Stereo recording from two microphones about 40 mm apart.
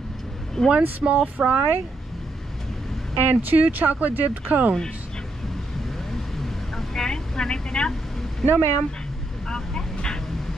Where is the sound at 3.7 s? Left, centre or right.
Right.